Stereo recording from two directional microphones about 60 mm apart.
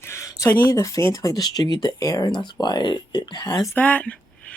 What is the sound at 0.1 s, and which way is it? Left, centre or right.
Speech, left.